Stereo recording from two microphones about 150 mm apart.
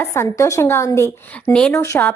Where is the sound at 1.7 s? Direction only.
20° left (ahead or behind).